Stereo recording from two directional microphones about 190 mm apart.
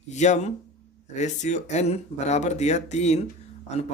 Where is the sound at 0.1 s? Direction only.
40° left (ahead or behind).